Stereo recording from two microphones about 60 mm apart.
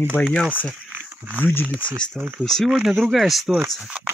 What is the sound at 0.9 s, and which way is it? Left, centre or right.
Wild animals, right.